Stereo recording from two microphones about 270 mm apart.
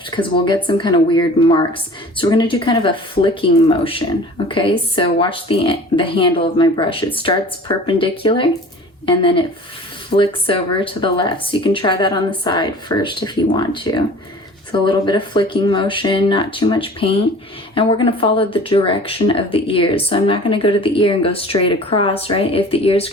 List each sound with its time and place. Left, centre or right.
0.2 s speech: centre